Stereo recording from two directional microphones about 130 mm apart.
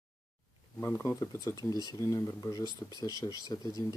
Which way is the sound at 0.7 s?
20° left (ahead or behind).